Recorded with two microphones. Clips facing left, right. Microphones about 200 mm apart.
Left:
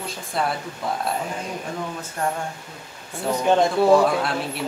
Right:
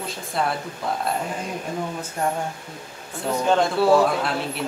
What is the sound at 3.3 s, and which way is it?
Speech, 15° left (ahead or behind).